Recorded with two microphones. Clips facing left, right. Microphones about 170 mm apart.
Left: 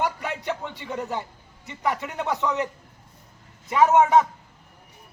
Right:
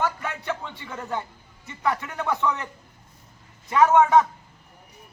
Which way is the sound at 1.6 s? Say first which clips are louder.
Even; 15° left (ahead or behind).